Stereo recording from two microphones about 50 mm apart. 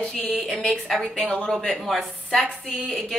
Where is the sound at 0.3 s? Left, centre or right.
Centre.